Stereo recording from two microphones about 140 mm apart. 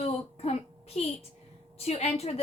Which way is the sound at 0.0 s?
50° left (ahead or behind).